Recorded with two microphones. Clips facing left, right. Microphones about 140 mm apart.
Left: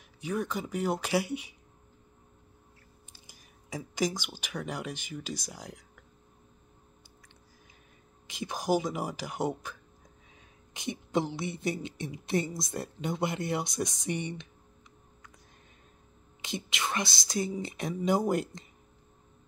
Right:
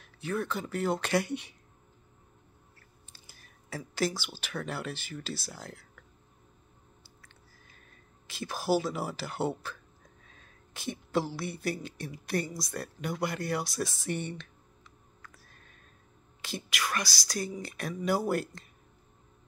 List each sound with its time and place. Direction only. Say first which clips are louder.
0.0 s speech: even; 15° left (ahead or behind)
3.1 s speech: even; 15° left (ahead or behind)
7.2 s music: left 1 dB; 15° left (ahead or behind)
8.3 s speech: even; 15° left (ahead or behind)
15.2 s music: right 2 dB; 15° left (ahead or behind)
16.3 s speech: even; 20° left (ahead or behind)